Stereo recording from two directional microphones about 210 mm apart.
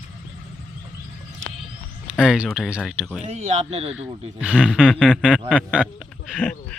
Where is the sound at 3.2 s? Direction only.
30° right (ahead or behind).